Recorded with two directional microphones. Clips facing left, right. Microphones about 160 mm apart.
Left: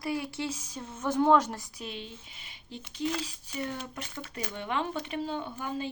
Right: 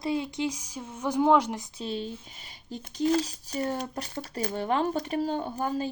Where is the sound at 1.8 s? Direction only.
35° right (ahead or behind).